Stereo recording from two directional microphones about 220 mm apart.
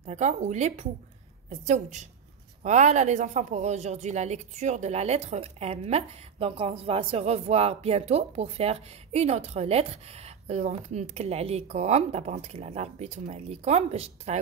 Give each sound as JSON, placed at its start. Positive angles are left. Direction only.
{"t": 0.0, "sound": "a woman's voice", "side_deg": -30}